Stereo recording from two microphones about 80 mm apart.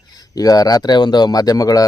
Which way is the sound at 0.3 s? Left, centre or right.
Left.